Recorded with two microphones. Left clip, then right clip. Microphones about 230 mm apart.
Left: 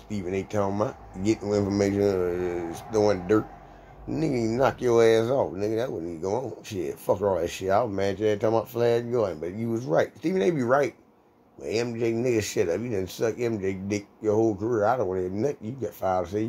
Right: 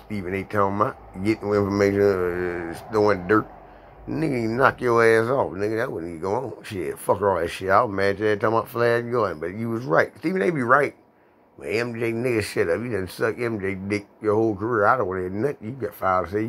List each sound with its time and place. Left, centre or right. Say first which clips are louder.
0.5 s speech: right 7 dB; centre
14.2 s speech: right 2 dB; centre